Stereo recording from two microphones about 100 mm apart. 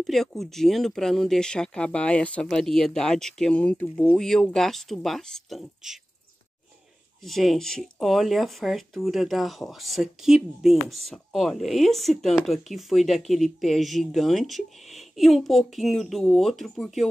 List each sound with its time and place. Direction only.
0.0 s speech: 5° left (ahead or behind)
4.1 s speech: 5° left (ahead or behind)
7.2 s speech: centre (ahead or behind)